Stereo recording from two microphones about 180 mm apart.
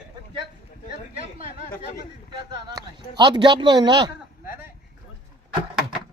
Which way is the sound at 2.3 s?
25° right (ahead or behind).